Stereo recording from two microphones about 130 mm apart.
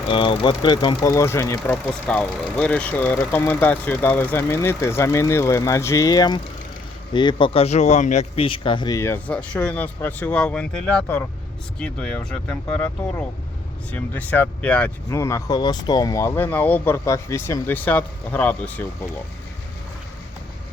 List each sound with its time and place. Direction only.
0.1 s speech: 40° left (ahead or behind)
1.0 s speech: 20° left (ahead or behind)
1.6 s speech: 10° left (ahead or behind); by 8.4 s 60° left (ahead or behind)
8.4 s speech: 40° left (ahead or behind)
9.0 s speech: 15° left (ahead or behind)
15.1 s speech: 25° left (ahead or behind)